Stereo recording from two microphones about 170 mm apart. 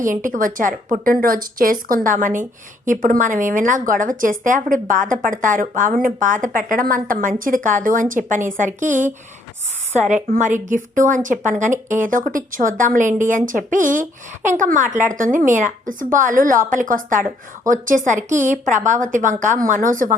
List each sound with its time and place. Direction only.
0.0 s a woman's voice: 50° right (ahead or behind)